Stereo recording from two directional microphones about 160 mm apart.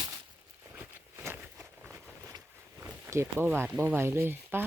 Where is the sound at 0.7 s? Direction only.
15° right (ahead or behind).